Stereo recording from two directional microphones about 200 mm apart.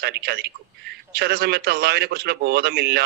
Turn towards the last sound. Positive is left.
turn(degrees=-55)  # may be behind; listen again after turning